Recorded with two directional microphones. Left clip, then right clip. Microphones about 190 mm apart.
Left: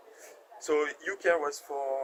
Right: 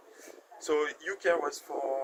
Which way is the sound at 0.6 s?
10° left (ahead or behind).